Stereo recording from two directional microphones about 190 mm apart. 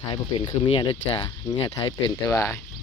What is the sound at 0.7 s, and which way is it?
Speech, 30° left (ahead or behind).